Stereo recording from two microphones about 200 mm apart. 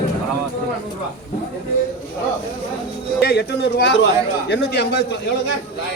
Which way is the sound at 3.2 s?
55° left (ahead or behind).